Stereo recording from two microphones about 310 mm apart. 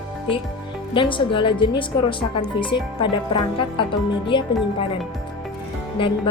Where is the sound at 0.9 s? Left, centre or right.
Centre.